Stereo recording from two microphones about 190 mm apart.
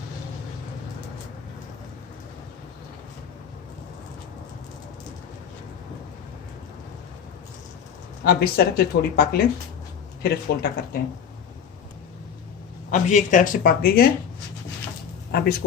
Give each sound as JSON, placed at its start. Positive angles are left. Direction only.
{"t": 8.2, "sound": "speech", "side_deg": 55}
{"t": 12.9, "sound": "speech", "side_deg": 40}
{"t": 15.3, "sound": "speech", "side_deg": 55}